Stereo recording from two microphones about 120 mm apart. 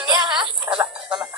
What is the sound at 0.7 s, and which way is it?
Frog, 20° right (ahead or behind).